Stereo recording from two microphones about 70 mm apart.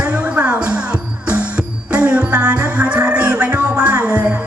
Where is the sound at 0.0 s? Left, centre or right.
Centre.